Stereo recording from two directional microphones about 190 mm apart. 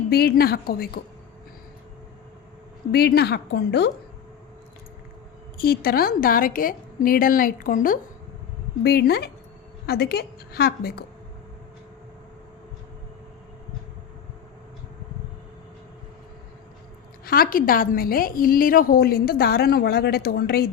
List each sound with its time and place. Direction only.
0.1 s a woman's voice: 55° left (ahead or behind)
2.9 s a woman's voice: 55° left (ahead or behind)
5.5 s a woman's voice: 50° left (ahead or behind)
8.8 s a woman's voice: 55° left (ahead or behind)
17.2 s a woman's voice: 50° left (ahead or behind)